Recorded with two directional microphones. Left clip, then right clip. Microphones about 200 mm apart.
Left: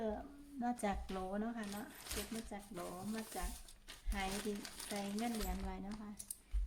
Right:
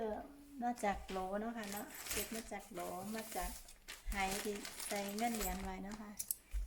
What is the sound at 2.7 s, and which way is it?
Speech, 5° left (ahead or behind).